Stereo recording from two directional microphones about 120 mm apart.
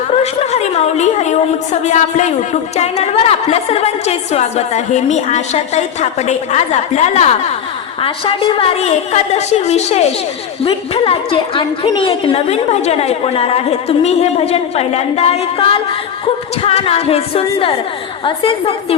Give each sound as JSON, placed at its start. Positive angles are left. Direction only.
{"t": 0.2, "sound": "a woman's voice", "side_deg": 65}
{"t": 8.0, "sound": "a woman's voice", "side_deg": 50}
{"t": 10.6, "sound": "a woman's voice", "side_deg": 50}